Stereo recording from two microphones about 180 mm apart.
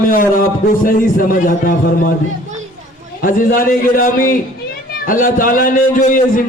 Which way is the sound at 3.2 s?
50° left (ahead or behind).